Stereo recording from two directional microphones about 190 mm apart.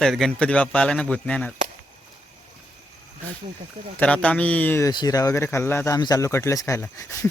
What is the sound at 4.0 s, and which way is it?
Speech, 5° left (ahead or behind).